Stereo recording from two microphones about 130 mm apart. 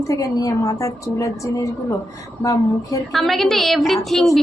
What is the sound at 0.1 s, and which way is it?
A woman's voice, 25° left (ahead or behind).